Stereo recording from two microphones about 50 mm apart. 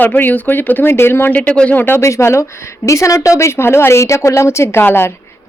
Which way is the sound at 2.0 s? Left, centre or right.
Left.